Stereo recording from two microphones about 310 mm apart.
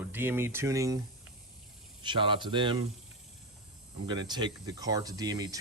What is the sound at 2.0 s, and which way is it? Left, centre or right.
Speech, centre.